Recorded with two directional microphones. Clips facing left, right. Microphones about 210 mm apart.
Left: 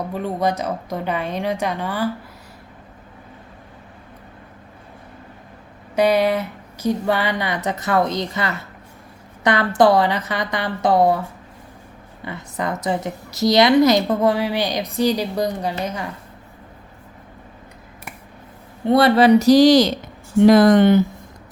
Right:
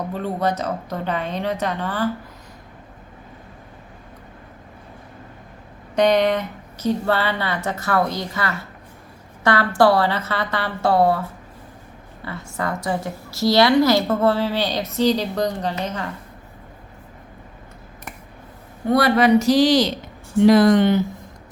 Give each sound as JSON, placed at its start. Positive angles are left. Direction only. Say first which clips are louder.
{"t": 0.1, "sound": "a woman's voice", "louder": "left 2 dB", "side_deg": 10}
{"t": 6.0, "sound": "a woman's voice", "louder": "even", "side_deg": 5}
{"t": 12.2, "sound": "a woman's voice", "louder": "left 1 dB", "side_deg": 20}
{"t": 18.9, "sound": "speech", "louder": "left 3 dB", "side_deg": 25}